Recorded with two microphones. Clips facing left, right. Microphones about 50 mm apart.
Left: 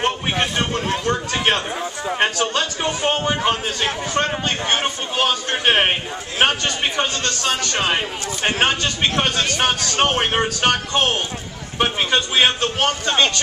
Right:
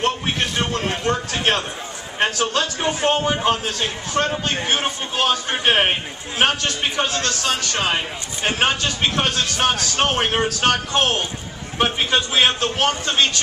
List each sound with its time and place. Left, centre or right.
0.0 s a sound: centre
3.0 s a man's voice: centre
4.2 s a man's voice: left
4.5 s a man's voice: centre